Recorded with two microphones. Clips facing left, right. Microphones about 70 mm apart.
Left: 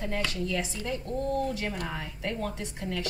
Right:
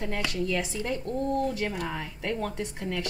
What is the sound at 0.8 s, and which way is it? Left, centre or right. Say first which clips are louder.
Speech: right 2 dB; right.